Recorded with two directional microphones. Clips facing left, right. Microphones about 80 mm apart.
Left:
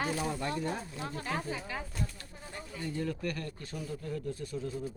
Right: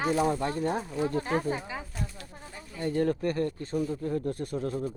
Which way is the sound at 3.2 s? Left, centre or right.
Right.